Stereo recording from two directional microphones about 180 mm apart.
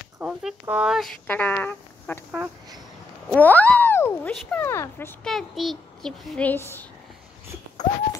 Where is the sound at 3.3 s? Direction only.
10° left (ahead or behind).